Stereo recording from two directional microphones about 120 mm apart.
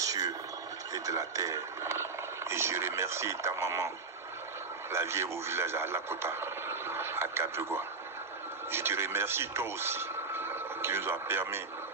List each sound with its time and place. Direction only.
0.0 s a sound: 30° right (ahead or behind)
0.9 s speech: 30° right (ahead or behind)
4.9 s a man's voice: 20° right (ahead or behind)